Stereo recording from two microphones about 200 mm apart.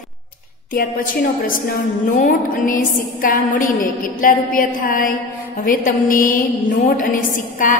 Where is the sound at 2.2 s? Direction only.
40° left (ahead or behind).